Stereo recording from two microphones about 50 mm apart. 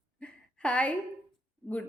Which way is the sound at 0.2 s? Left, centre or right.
Left.